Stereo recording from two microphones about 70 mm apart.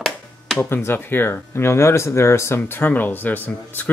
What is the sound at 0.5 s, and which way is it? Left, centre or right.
Speech, left.